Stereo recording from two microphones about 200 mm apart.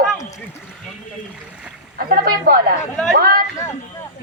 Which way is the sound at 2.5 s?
45° right (ahead or behind).